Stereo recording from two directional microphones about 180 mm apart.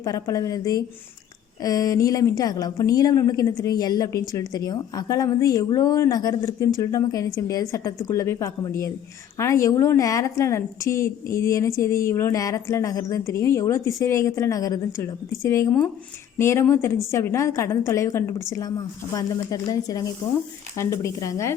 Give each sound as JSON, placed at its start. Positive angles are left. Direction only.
{"t": 0.0, "sound": "a woman's voice", "side_deg": 20}